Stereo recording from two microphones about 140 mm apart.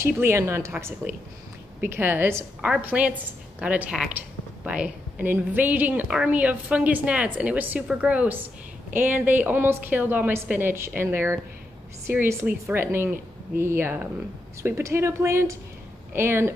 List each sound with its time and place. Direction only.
0.0 s a woman's voice: 20° right (ahead or behind)